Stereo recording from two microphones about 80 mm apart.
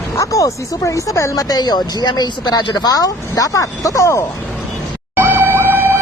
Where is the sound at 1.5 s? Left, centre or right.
Left.